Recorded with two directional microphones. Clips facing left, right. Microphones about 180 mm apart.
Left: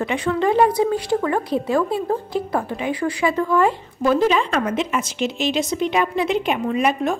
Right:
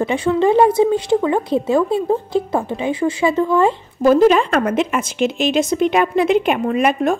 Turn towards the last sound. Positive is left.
turn(degrees=-55)  # may be behind; listen again after turning